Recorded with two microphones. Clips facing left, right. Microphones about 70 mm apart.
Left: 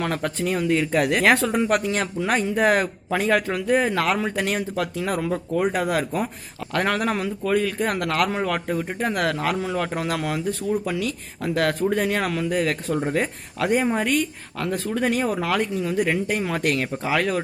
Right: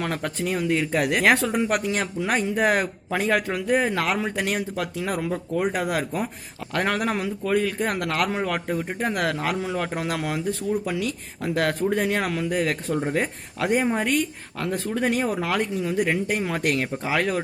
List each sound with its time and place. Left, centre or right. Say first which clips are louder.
0.0 s speech: left 2 dB; centre